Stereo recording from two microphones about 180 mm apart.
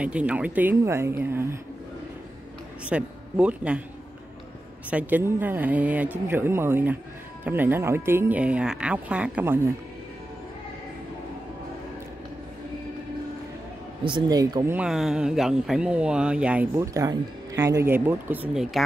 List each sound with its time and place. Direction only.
0.0 s speech: 5° right (ahead or behind)
2.8 s speech: 5° right (ahead or behind)
4.8 s speech: 10° right (ahead or behind)
14.0 s speech: 25° right (ahead or behind)
14.8 s speech: centre (ahead or behind)